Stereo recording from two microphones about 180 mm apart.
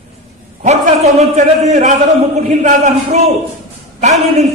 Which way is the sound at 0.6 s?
35° right (ahead or behind).